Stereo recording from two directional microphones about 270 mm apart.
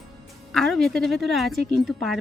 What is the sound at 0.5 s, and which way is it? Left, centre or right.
Speech, centre.